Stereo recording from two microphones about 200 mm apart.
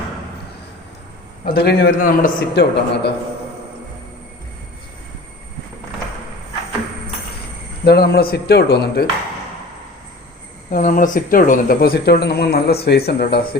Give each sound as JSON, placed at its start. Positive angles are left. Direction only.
{"t": 1.5, "sound": "speech", "side_deg": 50}
{"t": 7.9, "sound": "speech", "side_deg": 55}
{"t": 10.7, "sound": "speech", "side_deg": 40}